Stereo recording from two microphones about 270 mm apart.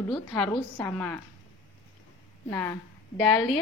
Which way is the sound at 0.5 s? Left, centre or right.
Centre.